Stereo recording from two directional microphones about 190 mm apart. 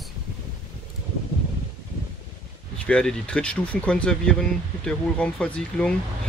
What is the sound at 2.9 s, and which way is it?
Speech, 5° left (ahead or behind).